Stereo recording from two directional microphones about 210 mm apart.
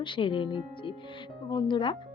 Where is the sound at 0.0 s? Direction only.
25° left (ahead or behind).